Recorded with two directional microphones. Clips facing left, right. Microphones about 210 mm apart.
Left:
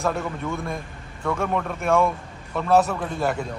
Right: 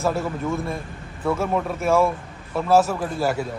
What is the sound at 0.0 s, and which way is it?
A man's voice, centre (ahead or behind).